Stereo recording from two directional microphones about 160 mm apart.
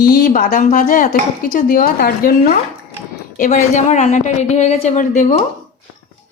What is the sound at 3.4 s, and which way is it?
A woman's voice, 50° left (ahead or behind).